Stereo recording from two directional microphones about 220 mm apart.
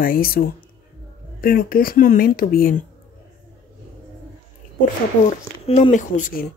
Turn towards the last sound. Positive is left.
turn(degrees=35)  # may be behind; listen again after turning